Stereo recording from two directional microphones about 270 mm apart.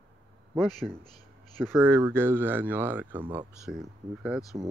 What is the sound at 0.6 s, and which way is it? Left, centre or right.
Speech, centre.